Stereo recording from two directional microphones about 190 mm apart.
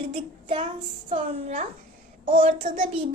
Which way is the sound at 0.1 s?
30° right (ahead or behind).